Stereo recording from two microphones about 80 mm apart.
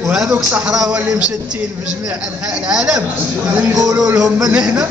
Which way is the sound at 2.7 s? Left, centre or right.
Centre.